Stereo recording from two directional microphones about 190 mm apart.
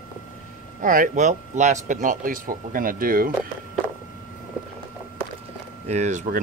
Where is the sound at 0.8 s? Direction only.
45° right (ahead or behind).